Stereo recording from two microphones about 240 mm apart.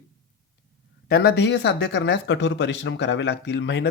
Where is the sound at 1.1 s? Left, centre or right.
Left.